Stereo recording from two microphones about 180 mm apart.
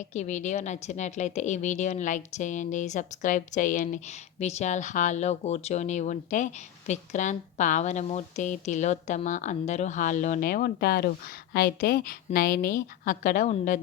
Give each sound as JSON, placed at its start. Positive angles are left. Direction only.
{"t": 0.0, "sound": "a woman's voice", "side_deg": 40}